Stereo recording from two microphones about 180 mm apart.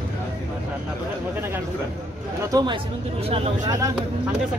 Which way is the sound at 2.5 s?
20° right (ahead or behind).